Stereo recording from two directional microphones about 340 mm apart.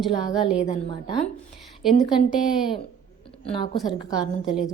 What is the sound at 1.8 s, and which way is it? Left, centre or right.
Speech, centre.